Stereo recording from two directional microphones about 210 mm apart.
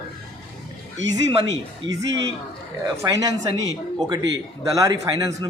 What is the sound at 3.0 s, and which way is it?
A man's voice, 15° right (ahead or behind).